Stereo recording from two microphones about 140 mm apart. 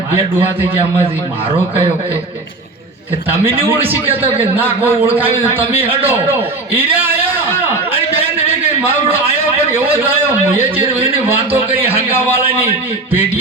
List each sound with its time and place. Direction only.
0.3 s a man's voice: 40° right (ahead or behind)
3.8 s a man's voice: 15° right (ahead or behind)
4.1 s a man's voice: 40° right (ahead or behind)
4.5 s a man's voice: 15° right (ahead or behind)
5.5 s a man's voice: 40° right (ahead or behind)
11.7 s a sound: 15° right (ahead or behind)